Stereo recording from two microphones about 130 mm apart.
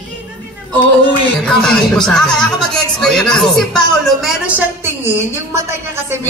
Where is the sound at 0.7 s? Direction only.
35° right (ahead or behind).